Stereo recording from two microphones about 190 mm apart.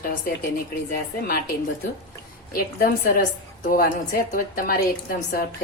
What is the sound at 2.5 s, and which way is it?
A woman's voice, 50° left (ahead or behind).